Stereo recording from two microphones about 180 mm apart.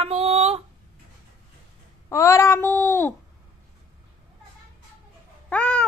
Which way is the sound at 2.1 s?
15° left (ahead or behind).